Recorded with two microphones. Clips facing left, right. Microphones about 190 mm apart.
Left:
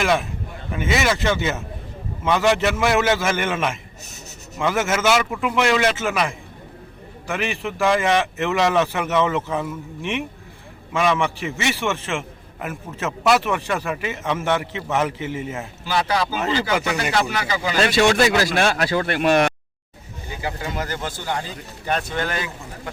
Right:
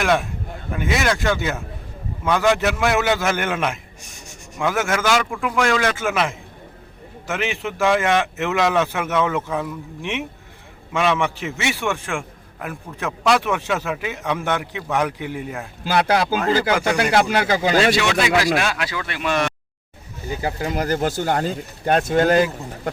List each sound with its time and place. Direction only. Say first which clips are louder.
0.0 s a man's voice: right 1 dB; centre (ahead or behind)
4.0 s speech: left 1 dB; 10° right (ahead or behind)
4.5 s a man's voice: even; centre (ahead or behind)
10.9 s a man's voice: even; centre (ahead or behind)
15.9 s speech: right 4 dB; 55° right (ahead or behind)
17.9 s speech: left 2 dB; 45° left (ahead or behind)
20.4 s speech: right 3 dB; 40° right (ahead or behind)